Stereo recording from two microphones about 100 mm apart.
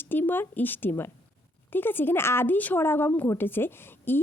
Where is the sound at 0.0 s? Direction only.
20° left (ahead or behind).